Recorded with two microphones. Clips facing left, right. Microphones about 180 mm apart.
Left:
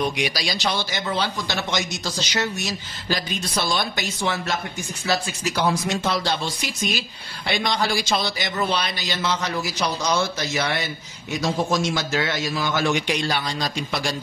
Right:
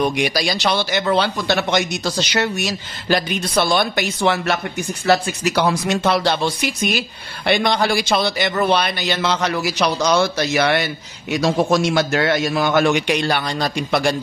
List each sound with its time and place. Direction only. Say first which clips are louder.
0.0 s speech: right 5 dB; 55° right (ahead or behind)